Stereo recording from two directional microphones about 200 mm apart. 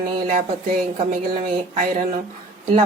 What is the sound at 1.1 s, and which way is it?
Speech, 40° right (ahead or behind).